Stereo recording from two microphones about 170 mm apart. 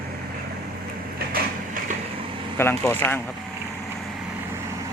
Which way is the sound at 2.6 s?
15° left (ahead or behind).